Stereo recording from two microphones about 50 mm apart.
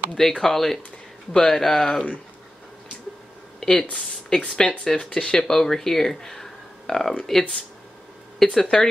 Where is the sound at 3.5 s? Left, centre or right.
Centre.